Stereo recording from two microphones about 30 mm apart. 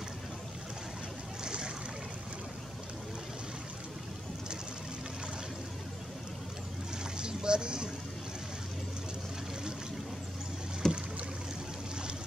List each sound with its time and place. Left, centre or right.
1.4 s boat: right
7.2 s a sound: right
10.8 s boat: centre